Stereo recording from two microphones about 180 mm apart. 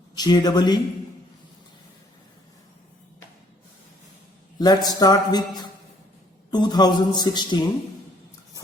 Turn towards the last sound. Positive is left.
turn(degrees=25)  # may be behind; listen again after turning